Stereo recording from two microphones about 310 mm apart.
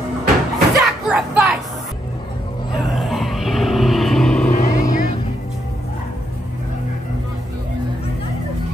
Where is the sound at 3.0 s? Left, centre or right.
Centre.